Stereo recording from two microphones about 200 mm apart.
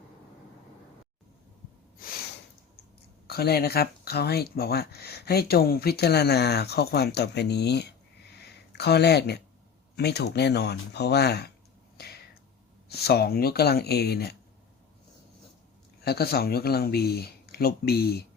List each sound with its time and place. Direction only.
2.0 s snort: 45° left (ahead or behind)
3.2 s speech: 50° left (ahead or behind)
8.3 s a sound: 55° left (ahead or behind)
9.9 s speech: 55° left (ahead or behind)
11.9 s finger snapping: 55° left (ahead or behind)
12.9 s speech: 55° left (ahead or behind)
16.0 s speech: 50° left (ahead or behind)